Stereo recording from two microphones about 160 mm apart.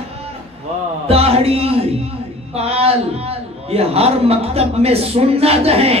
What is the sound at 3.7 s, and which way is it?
A man's voice, 40° right (ahead or behind).